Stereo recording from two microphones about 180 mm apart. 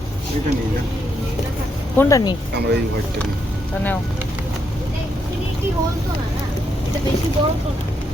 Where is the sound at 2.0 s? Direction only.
20° left (ahead or behind).